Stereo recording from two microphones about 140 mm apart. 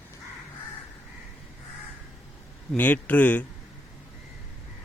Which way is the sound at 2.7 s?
10° left (ahead or behind).